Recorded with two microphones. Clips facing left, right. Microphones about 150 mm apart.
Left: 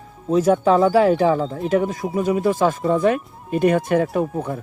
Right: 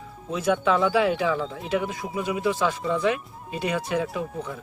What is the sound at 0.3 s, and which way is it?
Speech, 40° left (ahead or behind).